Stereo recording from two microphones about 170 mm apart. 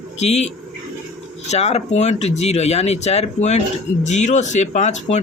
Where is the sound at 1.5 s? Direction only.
40° left (ahead or behind).